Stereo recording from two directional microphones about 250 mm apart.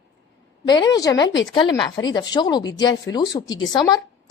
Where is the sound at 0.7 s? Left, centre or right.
Centre.